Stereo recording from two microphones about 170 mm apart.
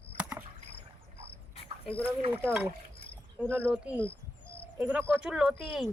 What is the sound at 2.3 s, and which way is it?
Speech, 10° right (ahead or behind).